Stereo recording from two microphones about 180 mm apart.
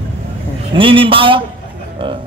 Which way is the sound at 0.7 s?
30° right (ahead or behind).